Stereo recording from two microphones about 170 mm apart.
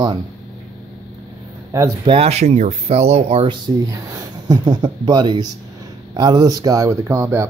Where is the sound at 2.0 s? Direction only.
35° right (ahead or behind).